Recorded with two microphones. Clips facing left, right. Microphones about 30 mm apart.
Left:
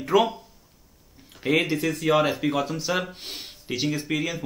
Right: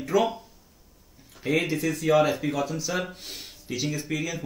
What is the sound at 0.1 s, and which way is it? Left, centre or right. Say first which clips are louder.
Speech: left 3 dB; left.